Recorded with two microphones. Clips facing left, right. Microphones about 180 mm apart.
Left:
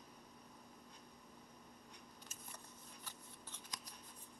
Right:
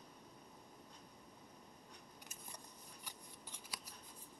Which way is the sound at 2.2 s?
15° right (ahead or behind).